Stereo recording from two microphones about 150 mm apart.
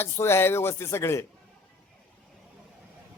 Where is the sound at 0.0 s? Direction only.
15° left (ahead or behind).